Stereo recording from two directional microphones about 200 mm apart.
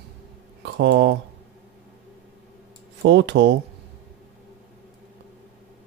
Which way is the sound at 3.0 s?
60° right (ahead or behind).